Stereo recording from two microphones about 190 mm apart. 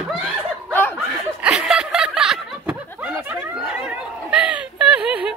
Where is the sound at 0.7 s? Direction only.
10° left (ahead or behind).